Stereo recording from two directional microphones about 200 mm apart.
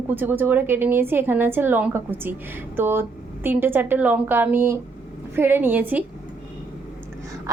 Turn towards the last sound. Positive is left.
turn(degrees=-15)  # may be behind; listen again after turning